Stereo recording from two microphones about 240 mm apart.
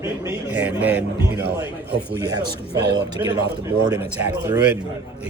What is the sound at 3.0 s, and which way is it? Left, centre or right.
Speech, centre.